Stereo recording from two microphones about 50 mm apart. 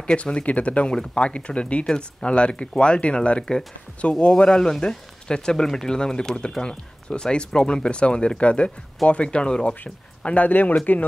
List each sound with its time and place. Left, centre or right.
0.0 s speech: left
10.2 s speech: left